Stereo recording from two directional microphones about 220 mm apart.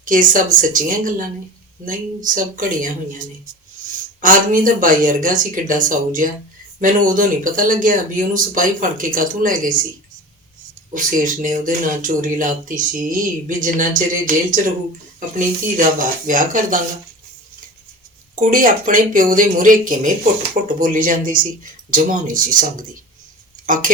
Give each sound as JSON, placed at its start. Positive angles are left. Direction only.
{"t": 0.0, "sound": "speech", "side_deg": -35}
{"t": 10.9, "sound": "speech", "side_deg": -35}
{"t": 18.3, "sound": "speech", "side_deg": -35}